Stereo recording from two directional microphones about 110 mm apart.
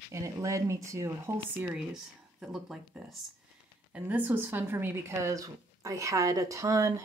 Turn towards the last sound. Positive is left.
turn(degrees=-30)  # may be behind; listen again after turning